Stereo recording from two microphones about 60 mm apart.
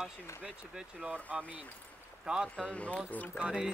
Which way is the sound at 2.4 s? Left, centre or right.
Centre.